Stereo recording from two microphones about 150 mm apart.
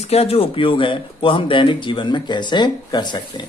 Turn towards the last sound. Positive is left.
turn(degrees=30)  # may be behind; listen again after turning